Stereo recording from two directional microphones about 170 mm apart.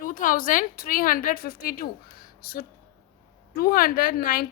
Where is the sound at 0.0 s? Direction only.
55° left (ahead or behind).